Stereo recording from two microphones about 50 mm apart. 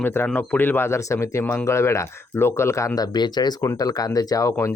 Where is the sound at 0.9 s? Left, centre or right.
Left.